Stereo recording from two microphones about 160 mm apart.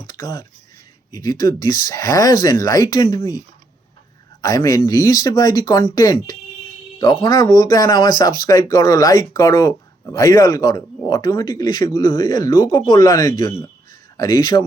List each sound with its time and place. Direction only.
0.1 s speech: 25° left (ahead or behind)